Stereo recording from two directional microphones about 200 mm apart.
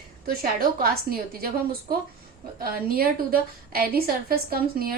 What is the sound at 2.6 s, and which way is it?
A woman's voice, 50° right (ahead or behind).